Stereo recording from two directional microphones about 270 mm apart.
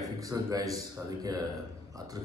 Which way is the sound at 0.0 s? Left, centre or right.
Centre.